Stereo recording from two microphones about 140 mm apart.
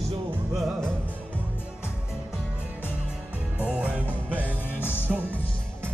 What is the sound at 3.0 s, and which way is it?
Music, 10° right (ahead or behind).